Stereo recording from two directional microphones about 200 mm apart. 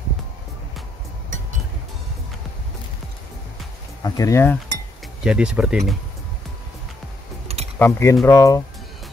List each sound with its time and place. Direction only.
4.0 s speech: 15° left (ahead or behind)
5.2 s speech: 5° right (ahead or behind)
7.4 s typing: 30° right (ahead or behind)
7.8 s speech: 15° left (ahead or behind)